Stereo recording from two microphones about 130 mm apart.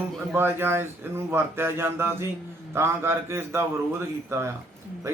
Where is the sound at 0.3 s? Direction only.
20° right (ahead or behind).